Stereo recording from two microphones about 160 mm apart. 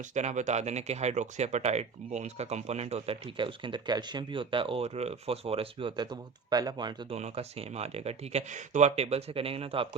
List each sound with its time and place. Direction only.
0.1 s speech: 45° right (ahead or behind); by 7.2 s 25° right (ahead or behind)
7.2 s speech: 40° right (ahead or behind)